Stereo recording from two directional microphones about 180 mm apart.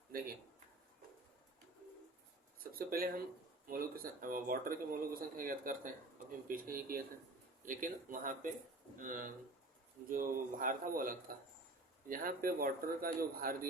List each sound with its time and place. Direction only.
0.1 s speech: 55° right (ahead or behind)
2.7 s speech: 55° right (ahead or behind)